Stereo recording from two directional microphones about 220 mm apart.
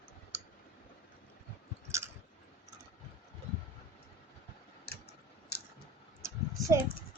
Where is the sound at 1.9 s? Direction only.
10° right (ahead or behind).